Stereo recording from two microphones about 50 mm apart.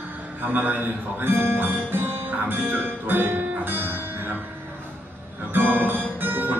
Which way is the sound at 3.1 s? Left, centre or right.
Right.